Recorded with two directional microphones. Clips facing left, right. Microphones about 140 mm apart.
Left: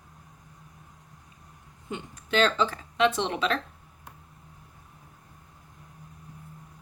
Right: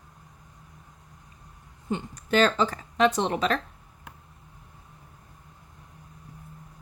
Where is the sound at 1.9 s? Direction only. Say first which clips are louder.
Right 4 dB; 40° right (ahead or behind).